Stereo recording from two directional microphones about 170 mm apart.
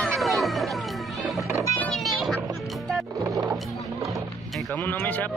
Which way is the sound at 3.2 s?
20° right (ahead or behind).